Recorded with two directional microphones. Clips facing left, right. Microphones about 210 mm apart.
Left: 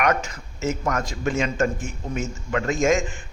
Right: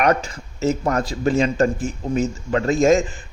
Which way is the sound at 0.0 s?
35° right (ahead or behind).